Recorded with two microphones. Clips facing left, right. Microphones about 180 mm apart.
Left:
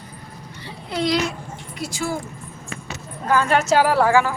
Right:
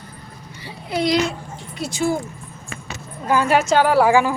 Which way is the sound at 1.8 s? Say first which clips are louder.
Right 5 dB; 20° right (ahead or behind).